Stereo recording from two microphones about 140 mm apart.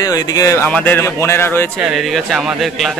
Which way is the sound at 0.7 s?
10° left (ahead or behind).